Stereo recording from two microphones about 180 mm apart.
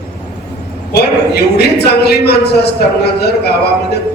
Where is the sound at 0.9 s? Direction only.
65° left (ahead or behind).